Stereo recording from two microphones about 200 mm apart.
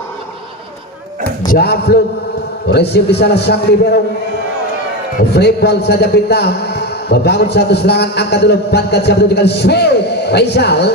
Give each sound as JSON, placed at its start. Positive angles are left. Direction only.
{"t": 1.4, "sound": "a man's voice", "side_deg": 45}
{"t": 5.3, "sound": "a man's voice", "side_deg": 55}